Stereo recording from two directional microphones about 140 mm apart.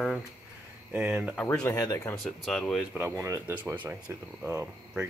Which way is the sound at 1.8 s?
25° left (ahead or behind).